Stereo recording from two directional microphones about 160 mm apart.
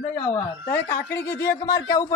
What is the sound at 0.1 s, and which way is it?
A man's voice, 15° left (ahead or behind).